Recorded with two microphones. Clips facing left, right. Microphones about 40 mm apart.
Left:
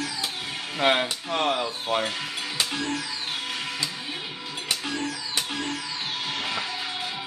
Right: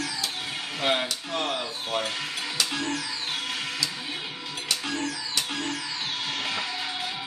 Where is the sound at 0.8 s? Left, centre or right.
Left.